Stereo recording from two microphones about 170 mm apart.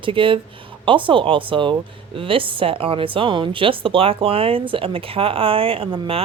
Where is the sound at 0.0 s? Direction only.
30° right (ahead or behind).